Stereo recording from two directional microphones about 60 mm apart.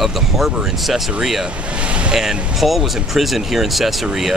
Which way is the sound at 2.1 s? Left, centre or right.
Centre.